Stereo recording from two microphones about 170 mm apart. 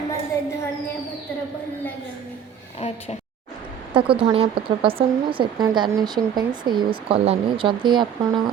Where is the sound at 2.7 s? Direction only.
40° left (ahead or behind).